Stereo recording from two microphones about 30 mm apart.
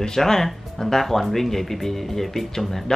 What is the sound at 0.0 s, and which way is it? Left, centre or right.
Speech, centre.